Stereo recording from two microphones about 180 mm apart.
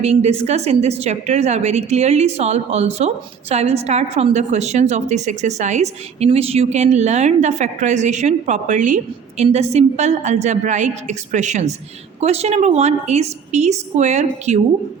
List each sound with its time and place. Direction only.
0.0 s a woman's voice: 35° right (ahead or behind)